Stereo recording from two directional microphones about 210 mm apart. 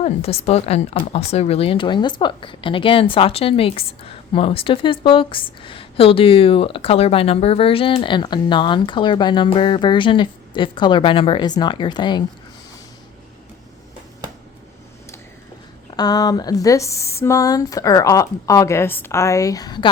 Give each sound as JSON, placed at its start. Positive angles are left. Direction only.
{"t": 0.0, "sound": "a woman's voice", "side_deg": 30}
{"t": 16.0, "sound": "speech", "side_deg": 20}